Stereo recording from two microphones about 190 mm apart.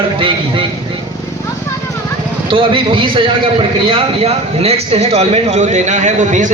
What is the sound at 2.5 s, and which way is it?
A man's voice, 25° right (ahead or behind).